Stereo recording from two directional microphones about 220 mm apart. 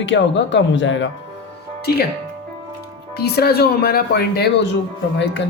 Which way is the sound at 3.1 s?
45° left (ahead or behind).